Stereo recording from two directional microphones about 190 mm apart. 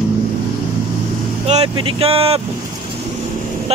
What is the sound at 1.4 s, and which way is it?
Speech, 35° right (ahead or behind).